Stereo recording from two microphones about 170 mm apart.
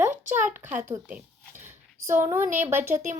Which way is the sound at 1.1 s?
10° right (ahead or behind).